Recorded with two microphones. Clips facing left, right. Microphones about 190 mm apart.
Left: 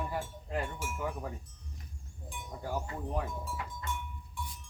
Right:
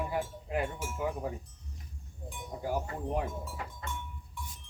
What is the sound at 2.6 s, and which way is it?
Speech, 10° right (ahead or behind).